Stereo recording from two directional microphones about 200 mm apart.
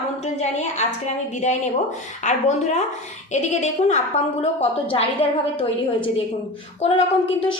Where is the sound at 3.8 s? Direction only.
35° left (ahead or behind).